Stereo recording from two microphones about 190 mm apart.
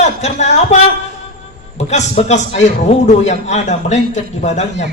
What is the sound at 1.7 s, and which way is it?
A man's voice, 35° left (ahead or behind).